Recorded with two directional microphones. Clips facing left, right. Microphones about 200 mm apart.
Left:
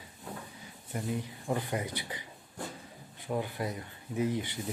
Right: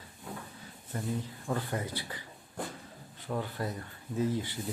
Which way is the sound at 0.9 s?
15° left (ahead or behind).